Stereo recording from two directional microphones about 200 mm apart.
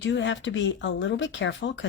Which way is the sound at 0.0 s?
65° left (ahead or behind).